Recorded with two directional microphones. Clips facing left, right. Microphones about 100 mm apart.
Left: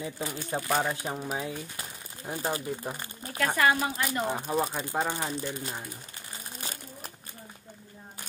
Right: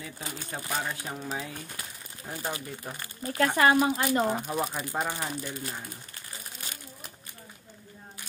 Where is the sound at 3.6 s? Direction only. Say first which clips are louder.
Right 3 dB; 25° right (ahead or behind).